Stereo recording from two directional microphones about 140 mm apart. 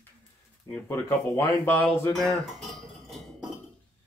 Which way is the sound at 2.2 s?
Centre (ahead or behind).